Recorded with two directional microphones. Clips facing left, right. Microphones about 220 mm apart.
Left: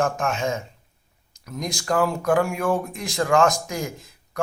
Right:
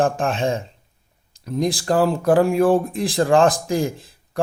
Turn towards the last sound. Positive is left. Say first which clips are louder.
# right 4 dB
turn(degrees=-30)  # may be behind; listen again after turning